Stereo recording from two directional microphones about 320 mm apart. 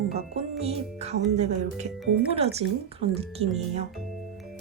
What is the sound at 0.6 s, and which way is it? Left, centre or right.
Speech, centre.